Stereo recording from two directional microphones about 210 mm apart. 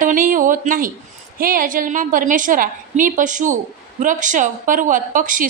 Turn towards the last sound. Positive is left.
turn(degrees=-40)  # may be behind; listen again after turning